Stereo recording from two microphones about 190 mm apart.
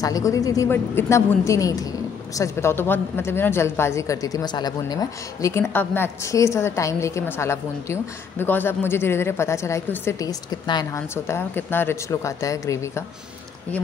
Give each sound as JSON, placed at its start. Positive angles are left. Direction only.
{"t": 0.0, "sound": "speech", "side_deg": 15}